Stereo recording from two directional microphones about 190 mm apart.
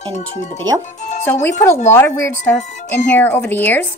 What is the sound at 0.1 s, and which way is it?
Speech, 40° left (ahead or behind).